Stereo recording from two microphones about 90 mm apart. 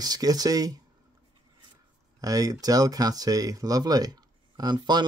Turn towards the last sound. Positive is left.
turn(degrees=-50)  # may be behind; listen again after turning